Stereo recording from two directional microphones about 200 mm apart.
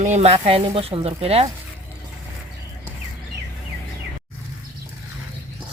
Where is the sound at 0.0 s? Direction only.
35° right (ahead or behind).